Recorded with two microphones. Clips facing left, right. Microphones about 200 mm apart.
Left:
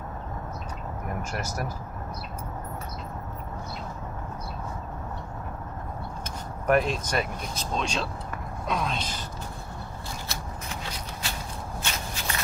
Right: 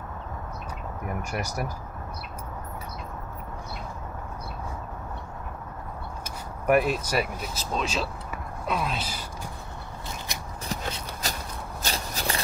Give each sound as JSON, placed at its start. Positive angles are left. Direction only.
{"t": 1.3, "sound": "speech", "side_deg": -10}
{"t": 6.7, "sound": "speech", "side_deg": -10}
{"t": 10.7, "sound": "shuffle", "side_deg": -40}
{"t": 11.8, "sound": "a sound", "side_deg": -35}